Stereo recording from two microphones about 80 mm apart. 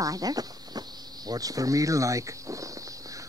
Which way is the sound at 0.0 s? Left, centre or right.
Right.